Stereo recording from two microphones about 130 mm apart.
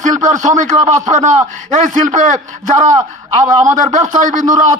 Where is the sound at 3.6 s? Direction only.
75° right (ahead or behind).